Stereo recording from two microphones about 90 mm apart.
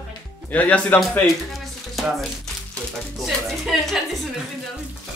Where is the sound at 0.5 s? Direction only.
15° left (ahead or behind).